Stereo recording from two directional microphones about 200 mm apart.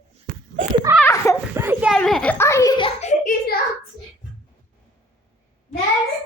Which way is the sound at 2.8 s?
35° left (ahead or behind).